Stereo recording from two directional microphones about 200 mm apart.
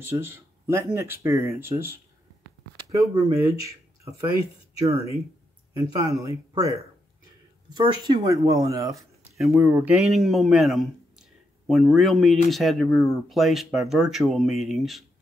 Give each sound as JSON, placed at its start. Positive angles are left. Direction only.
{"t": 0.0, "sound": "speech", "side_deg": -10}
{"t": 8.9, "sound": "a sound", "side_deg": 0}
{"t": 9.6, "sound": "speech", "side_deg": -10}